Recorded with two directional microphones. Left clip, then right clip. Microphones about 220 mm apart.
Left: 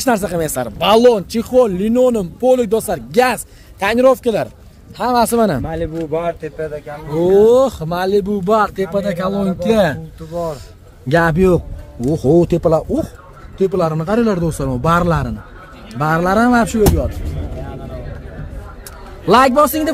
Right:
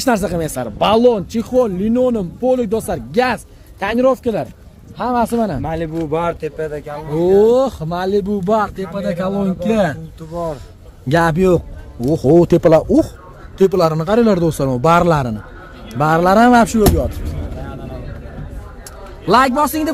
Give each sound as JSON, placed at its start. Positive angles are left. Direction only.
{"t": 0.0, "sound": "a man's voice", "side_deg": 0}
{"t": 0.3, "sound": "speech", "side_deg": 15}
{"t": 0.7, "sound": "speech", "side_deg": 25}
{"t": 4.9, "sound": "speech", "side_deg": 45}
{"t": 5.3, "sound": "speech", "side_deg": 25}
{"t": 5.7, "sound": "a man's voice", "side_deg": -45}
{"t": 7.1, "sound": "speech", "side_deg": 5}
{"t": 8.7, "sound": "speech", "side_deg": 30}
{"t": 11.1, "sound": "a man's voice", "side_deg": 5}
{"t": 12.5, "sound": "speech", "side_deg": -20}
{"t": 14.0, "sound": "speech", "side_deg": -15}
{"t": 19.2, "sound": "speech", "side_deg": 10}